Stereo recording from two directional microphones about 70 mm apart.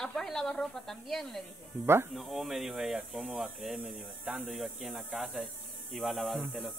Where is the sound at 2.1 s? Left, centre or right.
Centre.